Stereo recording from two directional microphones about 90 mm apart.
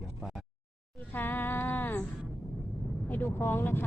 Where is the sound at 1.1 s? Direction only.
25° left (ahead or behind).